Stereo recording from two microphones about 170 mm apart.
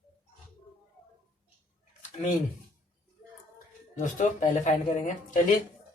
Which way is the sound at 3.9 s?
50° left (ahead or behind).